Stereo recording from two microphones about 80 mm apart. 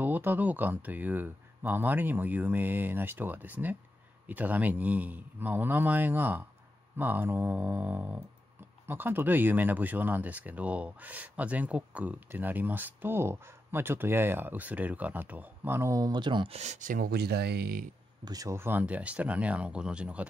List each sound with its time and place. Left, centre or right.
0.0 s speech: right
16.1 s speech: right
18.2 s speech: right
18.5 s speech: right